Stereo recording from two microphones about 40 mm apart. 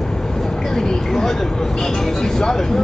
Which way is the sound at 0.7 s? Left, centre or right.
Centre.